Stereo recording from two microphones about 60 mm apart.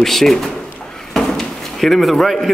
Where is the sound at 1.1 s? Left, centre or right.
Centre.